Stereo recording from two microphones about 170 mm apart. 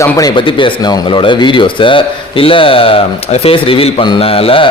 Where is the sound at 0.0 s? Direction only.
20° left (ahead or behind).